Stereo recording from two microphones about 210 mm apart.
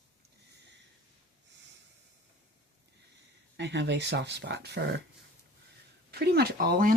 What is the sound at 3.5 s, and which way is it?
Speech, 55° right (ahead or behind).